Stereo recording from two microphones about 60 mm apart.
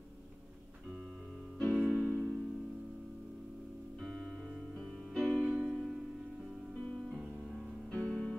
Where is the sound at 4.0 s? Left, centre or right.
Centre.